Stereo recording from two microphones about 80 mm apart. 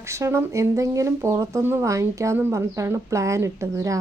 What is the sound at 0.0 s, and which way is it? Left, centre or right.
Speech, right.